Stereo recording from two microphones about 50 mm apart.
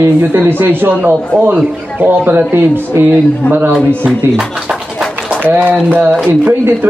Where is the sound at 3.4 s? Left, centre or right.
Left.